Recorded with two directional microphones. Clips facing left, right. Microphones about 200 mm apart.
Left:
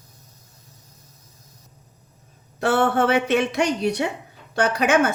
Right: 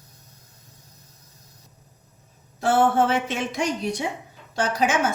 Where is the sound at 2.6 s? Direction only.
70° left (ahead or behind).